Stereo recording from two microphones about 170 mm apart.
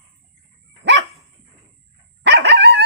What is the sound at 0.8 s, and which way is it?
Dog, 90° right.